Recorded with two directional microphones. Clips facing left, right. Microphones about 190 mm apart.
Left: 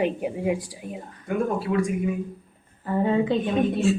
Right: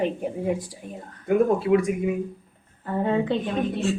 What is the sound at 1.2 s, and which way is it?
Speech, 20° right (ahead or behind).